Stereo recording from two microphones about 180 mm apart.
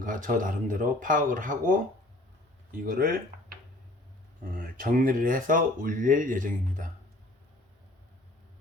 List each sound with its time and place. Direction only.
0.0 s speech: 45° right (ahead or behind)
2.7 s speech: 50° right (ahead or behind)